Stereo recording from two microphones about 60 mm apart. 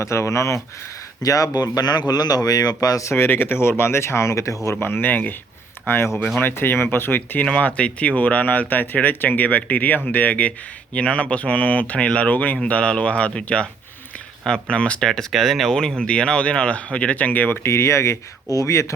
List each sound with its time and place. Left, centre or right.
0.0 s speech: left
1.2 s speech: left
3.1 s speech: left
4.7 s speech: left
6.1 s speech: centre
6.4 s speech: left
7.4 s speech: left
17.6 s speech: left